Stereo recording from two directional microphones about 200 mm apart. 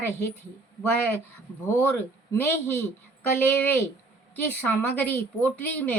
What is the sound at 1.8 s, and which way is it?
A woman's voice, 10° left (ahead or behind).